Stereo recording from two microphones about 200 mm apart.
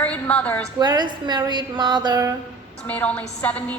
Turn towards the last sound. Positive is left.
turn(degrees=5)  # may be behind; listen again after turning